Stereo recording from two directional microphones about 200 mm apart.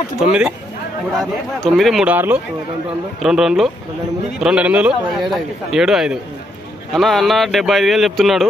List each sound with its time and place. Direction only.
0.2 s a man's voice: 5° right (ahead or behind)